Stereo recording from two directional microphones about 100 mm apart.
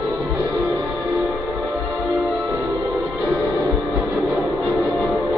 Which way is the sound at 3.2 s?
Centre (ahead or behind).